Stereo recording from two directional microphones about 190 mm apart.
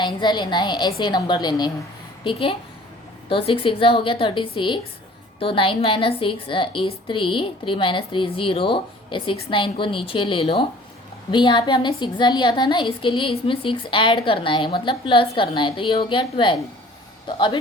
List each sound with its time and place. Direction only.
0.0 s a woman's voice: 25° left (ahead or behind)